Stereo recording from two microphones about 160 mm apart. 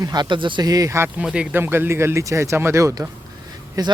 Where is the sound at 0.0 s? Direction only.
25° right (ahead or behind).